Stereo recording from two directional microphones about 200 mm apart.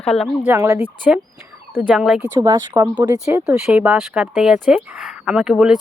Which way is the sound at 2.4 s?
20° right (ahead or behind).